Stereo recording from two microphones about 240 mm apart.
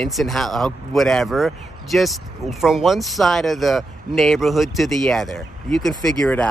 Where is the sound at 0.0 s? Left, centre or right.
Centre.